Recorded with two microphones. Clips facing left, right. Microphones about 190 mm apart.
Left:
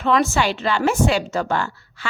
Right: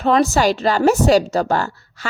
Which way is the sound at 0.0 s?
40° right (ahead or behind).